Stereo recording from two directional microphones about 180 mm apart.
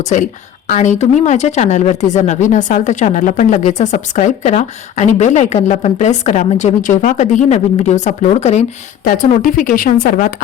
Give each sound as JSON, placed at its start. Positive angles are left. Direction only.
{"t": 0.0, "sound": "speech", "side_deg": 45}
{"t": 9.0, "sound": "speech", "side_deg": 50}